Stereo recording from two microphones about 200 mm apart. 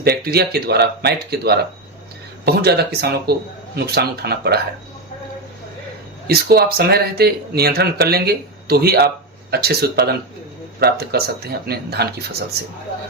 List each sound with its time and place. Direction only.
0.0 s speech: 50° right (ahead or behind)
6.2 s speech: 50° right (ahead or behind)